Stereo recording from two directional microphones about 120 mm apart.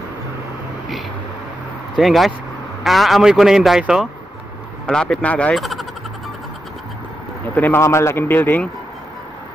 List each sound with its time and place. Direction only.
2.0 s speech: centre (ahead or behind)
4.8 s a man's voice: 5° left (ahead or behind)
5.6 s a sound: centre (ahead or behind)
7.5 s a man's voice: 20° left (ahead or behind)